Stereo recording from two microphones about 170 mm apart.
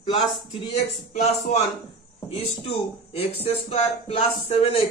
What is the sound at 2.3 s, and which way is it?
Speech, 35° left (ahead or behind).